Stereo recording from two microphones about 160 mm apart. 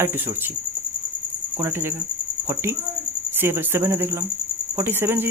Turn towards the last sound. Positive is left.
turn(degrees=-15)  # may be behind; listen again after turning